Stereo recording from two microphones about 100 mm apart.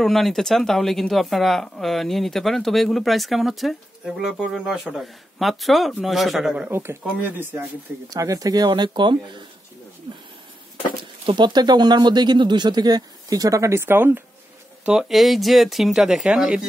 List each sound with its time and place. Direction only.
0.0 s speech: centre (ahead or behind)
6.7 s speech: 25° right (ahead or behind)
8.1 s speech: 35° right (ahead or behind); by 9.4 s 50° right (ahead or behind)
11.2 s speech: 50° right (ahead or behind); by 14.2 s 20° right (ahead or behind)
14.9 s speech: 5° right (ahead or behind)